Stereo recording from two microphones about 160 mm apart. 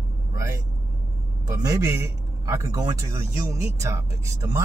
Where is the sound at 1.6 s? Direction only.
20° right (ahead or behind).